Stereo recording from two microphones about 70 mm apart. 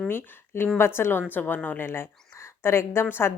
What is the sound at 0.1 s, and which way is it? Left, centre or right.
A woman's voice, left.